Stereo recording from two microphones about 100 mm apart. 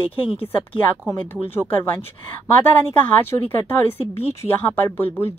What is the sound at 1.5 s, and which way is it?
Speech, 20° left (ahead or behind).